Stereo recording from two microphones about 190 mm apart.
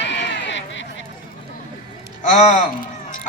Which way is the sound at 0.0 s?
70° left (ahead or behind).